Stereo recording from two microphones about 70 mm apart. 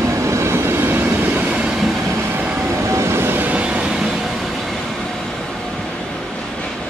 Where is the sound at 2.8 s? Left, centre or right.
Right; by 4.1 s centre.